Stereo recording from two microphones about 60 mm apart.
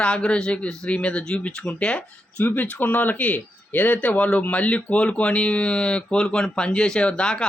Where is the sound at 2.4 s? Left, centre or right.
Left.